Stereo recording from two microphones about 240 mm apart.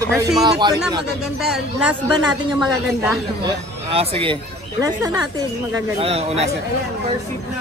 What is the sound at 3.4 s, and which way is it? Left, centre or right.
Speech, right.